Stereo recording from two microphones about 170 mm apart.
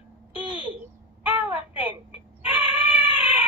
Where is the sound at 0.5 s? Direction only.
10° right (ahead or behind).